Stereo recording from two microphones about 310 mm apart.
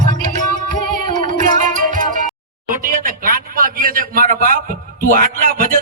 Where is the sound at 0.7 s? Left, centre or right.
Right.